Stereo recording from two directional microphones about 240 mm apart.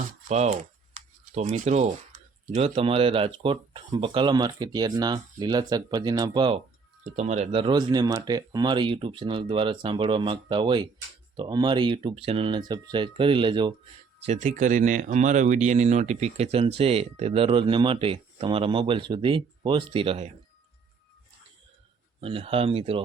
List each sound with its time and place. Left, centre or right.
0.3 s speech: right
14.3 s speech: right
22.2 s speech: right